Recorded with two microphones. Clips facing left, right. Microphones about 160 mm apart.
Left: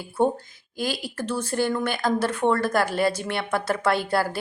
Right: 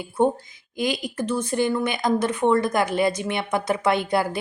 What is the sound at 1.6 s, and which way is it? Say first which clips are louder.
Speech: right 1 dB; 15° right (ahead or behind).